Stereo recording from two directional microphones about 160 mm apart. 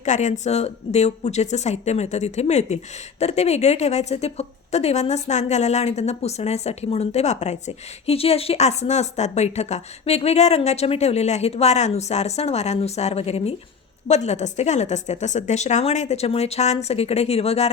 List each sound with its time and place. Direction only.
0.0 s a woman's voice: 50° left (ahead or behind)